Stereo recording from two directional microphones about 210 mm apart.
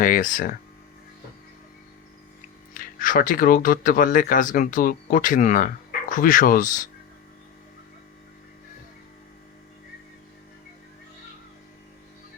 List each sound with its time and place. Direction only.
0.0 s speech: 40° left (ahead or behind)
2.7 s speech: 40° left (ahead or behind)